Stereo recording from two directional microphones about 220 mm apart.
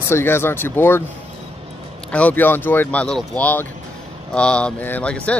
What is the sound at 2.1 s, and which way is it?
Speech, 5° left (ahead or behind).